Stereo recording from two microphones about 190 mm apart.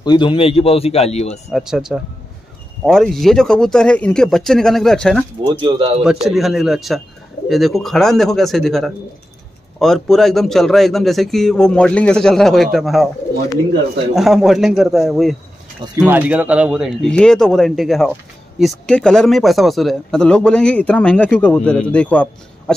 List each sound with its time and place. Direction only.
0.0 s a man's voice: 25° left (ahead or behind)
1.5 s speech: 5° right (ahead or behind)
14.1 s speech: centre (ahead or behind)